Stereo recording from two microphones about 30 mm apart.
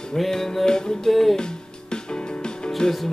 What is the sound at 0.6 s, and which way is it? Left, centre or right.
Music, left.